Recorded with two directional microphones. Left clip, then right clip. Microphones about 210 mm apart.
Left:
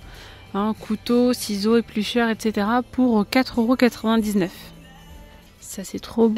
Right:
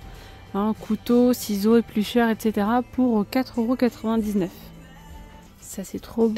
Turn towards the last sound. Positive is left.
turn(degrees=5)  # may be behind; listen again after turning